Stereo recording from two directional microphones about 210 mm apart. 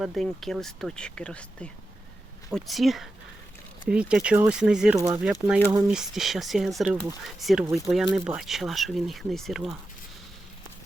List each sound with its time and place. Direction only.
0.0 s speech: centre (ahead or behind)
4.9 s speech: 15° right (ahead or behind)
5.2 s speech: 5° right (ahead or behind)